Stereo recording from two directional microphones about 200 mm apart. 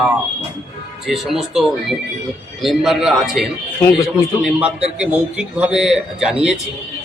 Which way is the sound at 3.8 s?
15° left (ahead or behind).